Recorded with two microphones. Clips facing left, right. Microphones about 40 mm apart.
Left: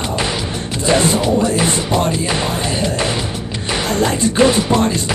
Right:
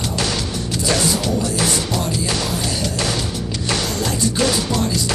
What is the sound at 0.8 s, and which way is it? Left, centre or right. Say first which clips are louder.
Music: left 6 dB; left.